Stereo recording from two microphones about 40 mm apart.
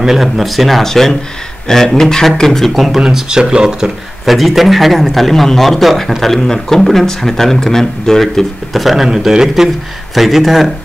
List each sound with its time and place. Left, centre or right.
0.0 s a man's voice: centre
2.7 s a man's voice: centre
3.0 s speech: centre
4.3 s a man's voice: centre
10.1 s a man's voice: centre